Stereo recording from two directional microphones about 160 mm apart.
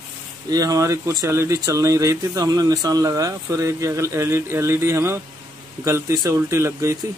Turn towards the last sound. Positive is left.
turn(degrees=-15)  # may be behind; listen again after turning